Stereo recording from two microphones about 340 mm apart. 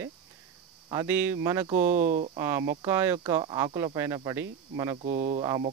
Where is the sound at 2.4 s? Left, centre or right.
Centre.